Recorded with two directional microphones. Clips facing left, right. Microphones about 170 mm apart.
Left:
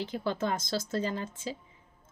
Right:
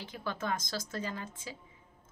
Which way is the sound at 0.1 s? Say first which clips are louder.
Left 2 dB; 30° left (ahead or behind).